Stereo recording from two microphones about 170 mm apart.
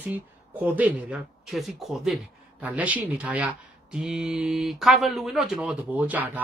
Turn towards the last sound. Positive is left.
turn(degrees=-10)  # may be behind; listen again after turning